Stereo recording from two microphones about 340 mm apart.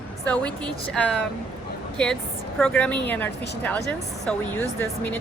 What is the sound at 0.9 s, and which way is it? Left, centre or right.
Speech, centre.